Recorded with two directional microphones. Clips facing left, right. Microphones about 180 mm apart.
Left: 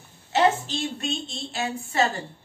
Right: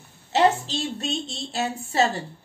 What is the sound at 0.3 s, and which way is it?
A woman's voice, 35° right (ahead or behind).